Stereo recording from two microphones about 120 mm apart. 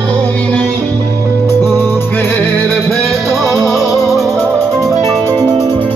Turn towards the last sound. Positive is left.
turn(degrees=0)  # may be behind; listen again after turning